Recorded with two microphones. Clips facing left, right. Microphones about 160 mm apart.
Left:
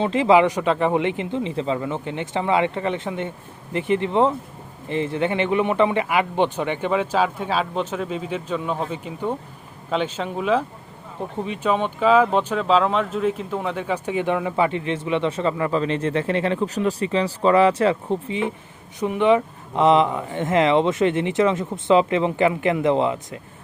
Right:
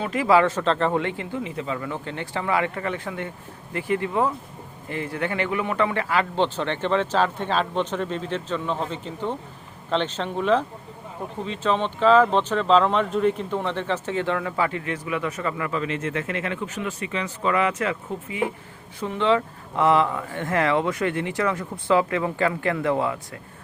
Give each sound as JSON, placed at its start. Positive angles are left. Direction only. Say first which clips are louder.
{"t": 0.0, "sound": "speech", "louder": "left 3 dB", "side_deg": 25}
{"t": 18.9, "sound": "speech", "louder": "left 4 dB", "side_deg": 15}